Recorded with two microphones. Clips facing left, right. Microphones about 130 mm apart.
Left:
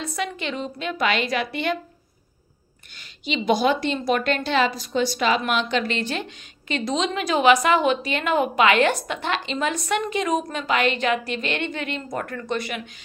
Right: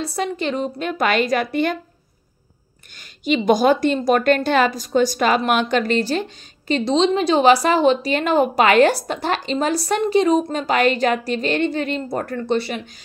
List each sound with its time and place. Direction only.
0.0 s a woman's voice: 35° right (ahead or behind)
3.0 s a woman's voice: 45° right (ahead or behind)